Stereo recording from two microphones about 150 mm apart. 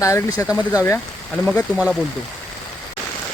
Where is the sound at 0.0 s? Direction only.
20° left (ahead or behind).